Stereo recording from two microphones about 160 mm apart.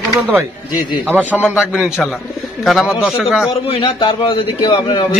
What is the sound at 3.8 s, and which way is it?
A man's voice, 35° left (ahead or behind).